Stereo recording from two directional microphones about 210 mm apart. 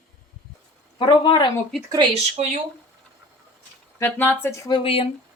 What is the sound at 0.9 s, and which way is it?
Speech, 25° left (ahead or behind).